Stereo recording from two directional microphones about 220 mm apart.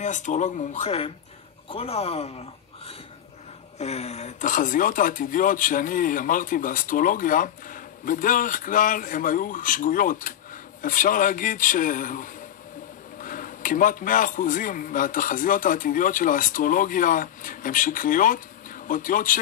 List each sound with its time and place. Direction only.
0.0 s speech: 35° left (ahead or behind)